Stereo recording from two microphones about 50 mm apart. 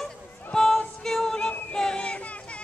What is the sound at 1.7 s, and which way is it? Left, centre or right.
Children playing, centre.